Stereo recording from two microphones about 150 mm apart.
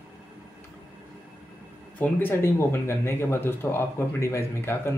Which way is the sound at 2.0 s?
15° left (ahead or behind).